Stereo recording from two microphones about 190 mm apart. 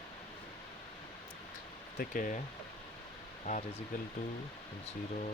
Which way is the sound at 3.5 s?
35° left (ahead or behind).